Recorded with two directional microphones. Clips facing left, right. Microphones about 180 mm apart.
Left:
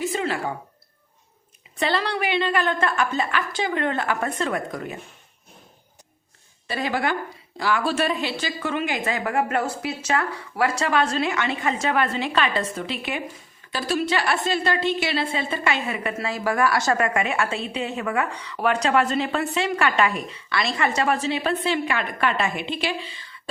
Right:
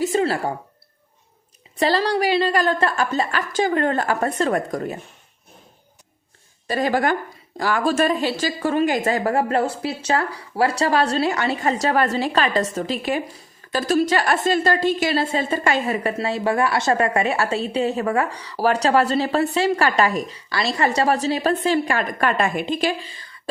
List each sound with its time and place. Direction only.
0.0 s speech: 40° right (ahead or behind)
1.8 s a woman's voice: 35° right (ahead or behind)
6.7 s a woman's voice: 45° right (ahead or behind)
16.1 s a woman's voice: 30° right (ahead or behind)